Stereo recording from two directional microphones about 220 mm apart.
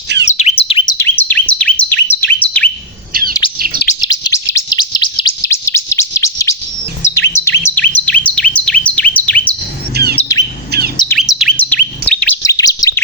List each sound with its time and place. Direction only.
0.3 s bird: 30° left (ahead or behind)
0.9 s bird: 10° left (ahead or behind)
3.1 s bird: 40° right (ahead or behind)
4.0 s bird: 20° left (ahead or behind)
9.1 s chirp: 5° left (ahead or behind)
9.9 s bird: 45° right (ahead or behind)
10.2 s squawk: 15° left (ahead or behind)
10.7 s bird: 45° right (ahead or behind)
11.2 s bird: centre (ahead or behind); by 12.9 s 15° left (ahead or behind)